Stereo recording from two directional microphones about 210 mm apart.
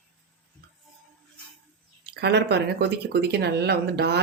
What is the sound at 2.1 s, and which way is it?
Speech, 55° right (ahead or behind).